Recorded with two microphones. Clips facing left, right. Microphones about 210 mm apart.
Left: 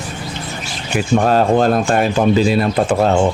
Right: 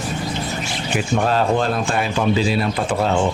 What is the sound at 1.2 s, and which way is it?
Speech, 45° left (ahead or behind).